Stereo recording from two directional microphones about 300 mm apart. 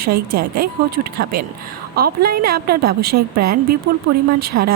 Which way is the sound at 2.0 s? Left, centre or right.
Right.